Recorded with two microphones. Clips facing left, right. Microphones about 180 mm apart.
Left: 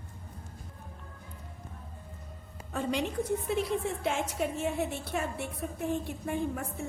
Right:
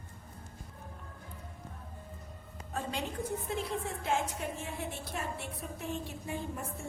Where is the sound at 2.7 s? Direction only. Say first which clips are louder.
Left 6 dB; 75° left (ahead or behind).